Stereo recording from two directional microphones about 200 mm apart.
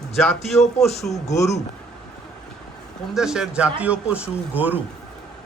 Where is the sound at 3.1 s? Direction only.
5° right (ahead or behind).